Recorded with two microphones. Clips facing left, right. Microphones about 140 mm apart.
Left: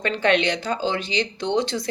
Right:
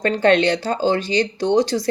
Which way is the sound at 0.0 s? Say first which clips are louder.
Right 5 dB; 40° right (ahead or behind).